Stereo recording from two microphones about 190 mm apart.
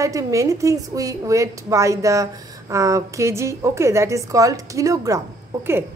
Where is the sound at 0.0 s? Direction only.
15° right (ahead or behind).